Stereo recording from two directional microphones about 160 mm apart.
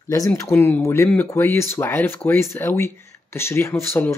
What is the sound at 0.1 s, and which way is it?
Speech, 20° left (ahead or behind).